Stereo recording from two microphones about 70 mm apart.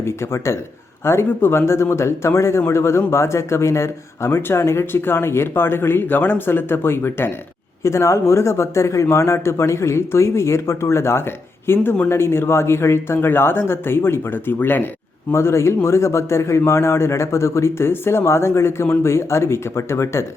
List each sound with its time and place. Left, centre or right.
0.0 s a man's voice: left
7.9 s a man's voice: left
15.3 s a man's voice: left